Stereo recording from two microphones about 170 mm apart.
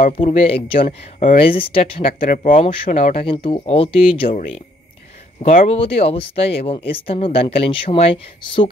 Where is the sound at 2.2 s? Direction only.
55° left (ahead or behind).